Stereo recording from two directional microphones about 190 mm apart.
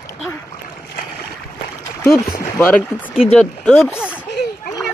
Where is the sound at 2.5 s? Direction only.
10° left (ahead or behind).